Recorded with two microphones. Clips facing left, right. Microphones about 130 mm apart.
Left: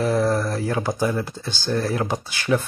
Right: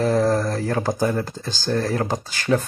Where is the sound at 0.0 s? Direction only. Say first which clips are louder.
Right 2 dB; 35° right (ahead or behind).